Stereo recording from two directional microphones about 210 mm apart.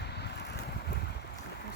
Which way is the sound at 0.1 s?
50° left (ahead or behind).